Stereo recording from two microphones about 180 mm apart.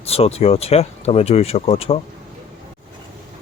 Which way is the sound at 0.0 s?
35° left (ahead or behind).